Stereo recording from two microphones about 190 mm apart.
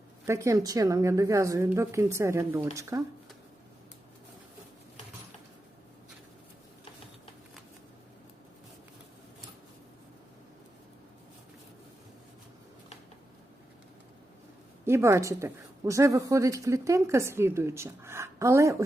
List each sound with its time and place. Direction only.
0.3 s a woman's voice: 15° right (ahead or behind)
14.8 s a woman's voice: 15° right (ahead or behind)